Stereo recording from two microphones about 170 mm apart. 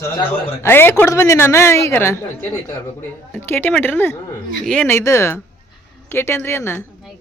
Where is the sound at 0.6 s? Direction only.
15° left (ahead or behind).